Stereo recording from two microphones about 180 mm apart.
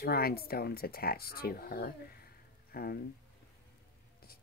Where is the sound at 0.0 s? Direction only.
60° left (ahead or behind).